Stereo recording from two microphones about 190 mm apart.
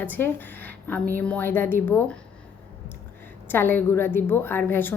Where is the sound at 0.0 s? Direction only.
10° left (ahead or behind).